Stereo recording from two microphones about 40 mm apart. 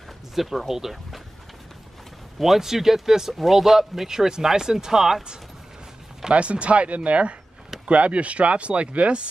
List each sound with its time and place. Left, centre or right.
0.3 s speech: centre
2.3 s speech: centre
6.3 s speech: right